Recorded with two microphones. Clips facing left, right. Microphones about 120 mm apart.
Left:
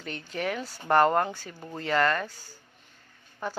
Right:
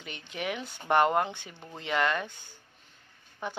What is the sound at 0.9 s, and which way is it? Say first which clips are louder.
Speech: left 2 dB; 5° right (ahead or behind).